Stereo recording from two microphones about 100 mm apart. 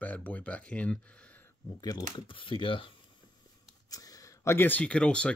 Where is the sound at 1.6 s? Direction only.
40° left (ahead or behind).